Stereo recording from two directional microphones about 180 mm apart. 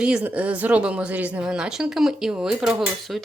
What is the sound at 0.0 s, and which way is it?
A woman's voice, 5° right (ahead or behind).